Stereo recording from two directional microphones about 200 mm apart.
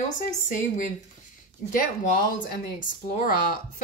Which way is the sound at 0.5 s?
40° left (ahead or behind).